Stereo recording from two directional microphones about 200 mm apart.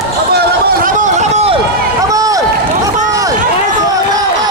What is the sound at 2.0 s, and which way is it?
Run, 15° right (ahead or behind).